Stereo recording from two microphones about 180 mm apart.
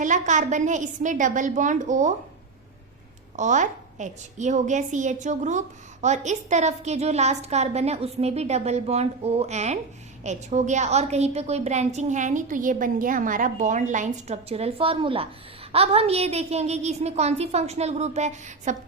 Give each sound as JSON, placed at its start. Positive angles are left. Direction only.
{"t": 0.0, "sound": "a woman's voice", "side_deg": -45}
{"t": 3.3, "sound": "a woman's voice", "side_deg": -40}